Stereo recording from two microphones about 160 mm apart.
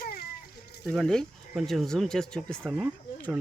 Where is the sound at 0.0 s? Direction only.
70° left (ahead or behind).